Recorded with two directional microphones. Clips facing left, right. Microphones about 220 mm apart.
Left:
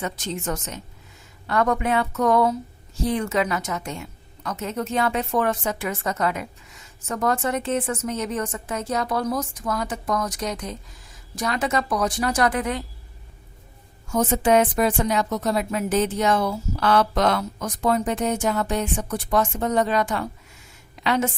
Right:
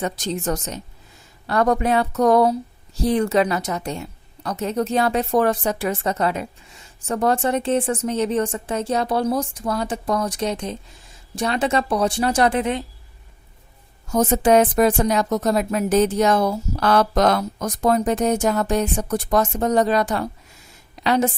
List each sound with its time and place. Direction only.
0.0 s a woman's voice: 35° right (ahead or behind)
14.1 s a woman's voice: 40° right (ahead or behind)